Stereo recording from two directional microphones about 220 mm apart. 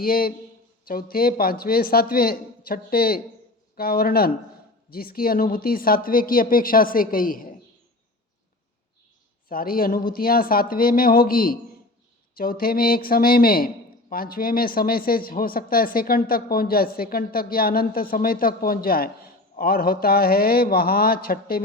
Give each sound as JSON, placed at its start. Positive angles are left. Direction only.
{"t": 0.0, "sound": "a man's voice", "side_deg": 40}
{"t": 9.5, "sound": "a man's voice", "side_deg": 40}